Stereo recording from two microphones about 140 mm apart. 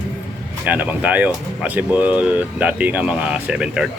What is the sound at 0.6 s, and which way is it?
Speech, 10° right (ahead or behind).